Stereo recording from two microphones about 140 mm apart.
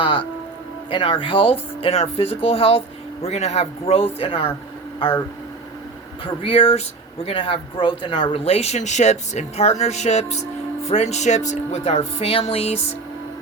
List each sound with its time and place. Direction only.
0.0 s speech: 35° left (ahead or behind)
6.2 s speech: 40° left (ahead or behind)